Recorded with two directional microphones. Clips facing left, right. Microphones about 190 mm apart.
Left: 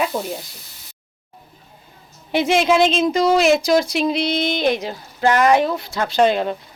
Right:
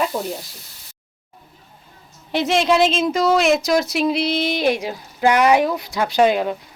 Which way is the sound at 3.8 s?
5° right (ahead or behind).